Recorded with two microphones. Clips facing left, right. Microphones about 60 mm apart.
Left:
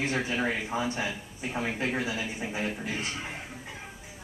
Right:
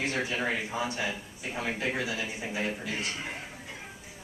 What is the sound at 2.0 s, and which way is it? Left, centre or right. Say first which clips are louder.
Speech: left 1 dB; left.